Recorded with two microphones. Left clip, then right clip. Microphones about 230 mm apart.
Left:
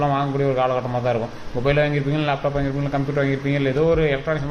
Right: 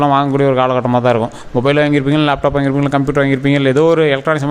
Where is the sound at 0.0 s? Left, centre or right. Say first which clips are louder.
Right 9 dB; right.